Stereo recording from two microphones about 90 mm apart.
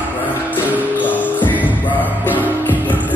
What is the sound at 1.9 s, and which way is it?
Music, 20° left (ahead or behind).